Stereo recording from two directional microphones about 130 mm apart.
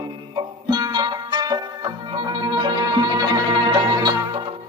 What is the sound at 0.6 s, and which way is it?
Music, 30° right (ahead or behind).